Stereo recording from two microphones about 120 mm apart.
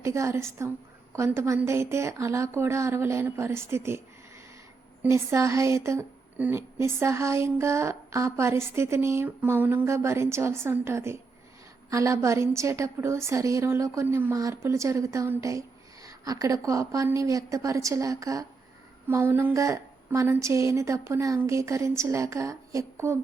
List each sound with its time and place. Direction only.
0.0 s a woman's voice: 25° right (ahead or behind)
5.0 s a woman's voice: 25° right (ahead or behind)